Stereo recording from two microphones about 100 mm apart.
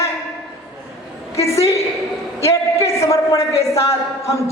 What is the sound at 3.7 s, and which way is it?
Speech, 30° left (ahead or behind).